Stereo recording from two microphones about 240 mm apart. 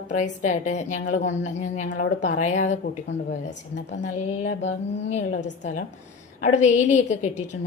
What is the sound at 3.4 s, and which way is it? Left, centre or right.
Speech, left.